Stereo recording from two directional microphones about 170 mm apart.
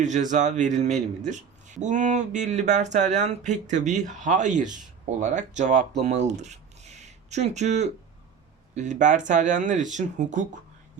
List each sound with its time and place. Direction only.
0.0 s speech: 45° right (ahead or behind)